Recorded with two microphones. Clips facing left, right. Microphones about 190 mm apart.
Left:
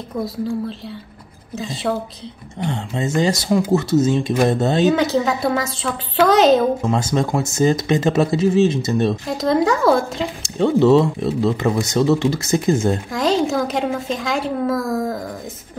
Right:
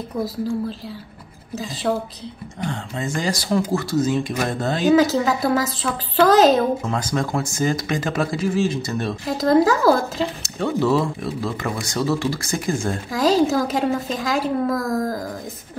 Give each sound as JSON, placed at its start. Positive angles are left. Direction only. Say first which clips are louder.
{"t": 0.2, "sound": "speech", "louder": "left 1 dB", "side_deg": 0}
{"t": 2.6, "sound": "speech", "louder": "left 4 dB", "side_deg": 25}
{"t": 4.8, "sound": "speech", "louder": "right 5 dB", "side_deg": 0}
{"t": 6.9, "sound": "speech", "louder": "left 4 dB", "side_deg": 25}
{"t": 9.3, "sound": "speech", "louder": "right 4 dB", "side_deg": 0}
{"t": 10.4, "sound": "speech", "louder": "left 9 dB", "side_deg": 25}
{"t": 13.1, "sound": "speech", "louder": "right 4 dB", "side_deg": 0}